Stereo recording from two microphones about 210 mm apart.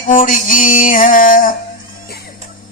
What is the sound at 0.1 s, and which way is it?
Speech, 40° left (ahead or behind).